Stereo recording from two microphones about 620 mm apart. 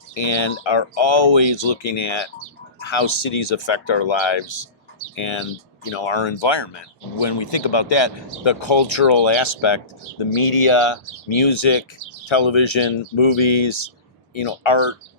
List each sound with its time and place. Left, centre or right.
0.2 s speech: left